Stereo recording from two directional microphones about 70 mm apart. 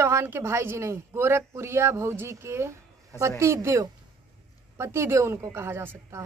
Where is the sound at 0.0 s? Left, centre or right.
Right.